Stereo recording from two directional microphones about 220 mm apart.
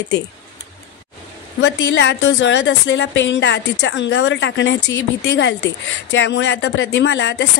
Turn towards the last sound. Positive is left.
turn(degrees=55)  # may be behind; listen again after turning